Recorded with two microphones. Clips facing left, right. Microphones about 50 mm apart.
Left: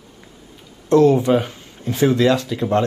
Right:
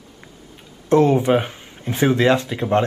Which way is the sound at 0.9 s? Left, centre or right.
Right.